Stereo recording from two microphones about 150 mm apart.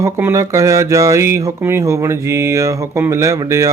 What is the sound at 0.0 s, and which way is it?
Speech, 15° right (ahead or behind).